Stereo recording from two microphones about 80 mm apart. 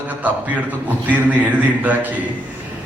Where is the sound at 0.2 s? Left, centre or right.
Centre.